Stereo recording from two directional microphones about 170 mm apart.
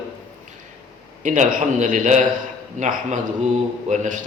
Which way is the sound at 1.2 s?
45° right (ahead or behind).